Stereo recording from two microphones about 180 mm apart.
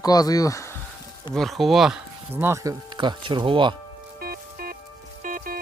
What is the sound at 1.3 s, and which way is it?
Speech, centre (ahead or behind).